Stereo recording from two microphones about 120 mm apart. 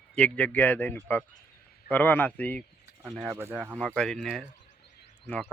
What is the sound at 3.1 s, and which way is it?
Speech, centre (ahead or behind).